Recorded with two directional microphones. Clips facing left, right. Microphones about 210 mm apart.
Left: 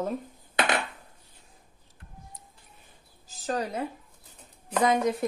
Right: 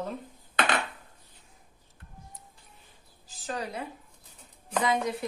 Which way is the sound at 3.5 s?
40° left (ahead or behind).